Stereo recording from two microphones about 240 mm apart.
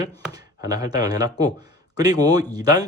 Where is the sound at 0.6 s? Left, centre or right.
Centre.